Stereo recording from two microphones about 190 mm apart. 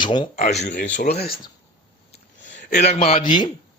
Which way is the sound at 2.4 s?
70° left (ahead or behind).